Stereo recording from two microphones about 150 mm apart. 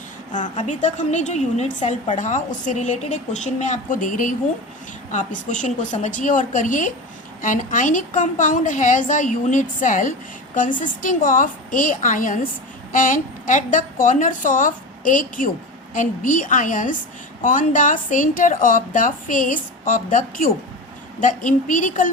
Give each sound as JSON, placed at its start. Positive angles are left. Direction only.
{"t": 0.3, "sound": "a woman's voice", "side_deg": 55}